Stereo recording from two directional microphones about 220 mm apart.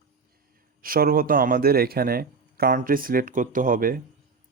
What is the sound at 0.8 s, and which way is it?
Speech, 40° right (ahead or behind).